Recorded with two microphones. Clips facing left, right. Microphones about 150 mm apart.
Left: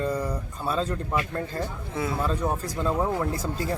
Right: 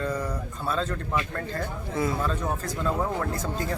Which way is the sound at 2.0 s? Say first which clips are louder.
Even; 5° left (ahead or behind).